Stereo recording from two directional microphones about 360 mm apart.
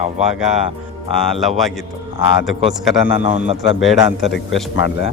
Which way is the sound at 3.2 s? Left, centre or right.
Centre.